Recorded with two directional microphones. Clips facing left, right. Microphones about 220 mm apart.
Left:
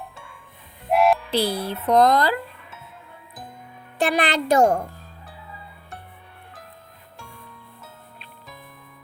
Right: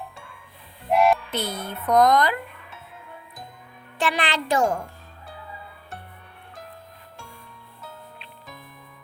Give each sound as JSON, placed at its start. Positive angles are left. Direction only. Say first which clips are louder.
{"t": 0.9, "sound": "a sound", "louder": "left 1 dB", "side_deg": 0}
{"t": 1.3, "sound": "speech", "louder": "left 6 dB", "side_deg": 30}
{"t": 4.1, "sound": "speech", "louder": "left 6 dB", "side_deg": 40}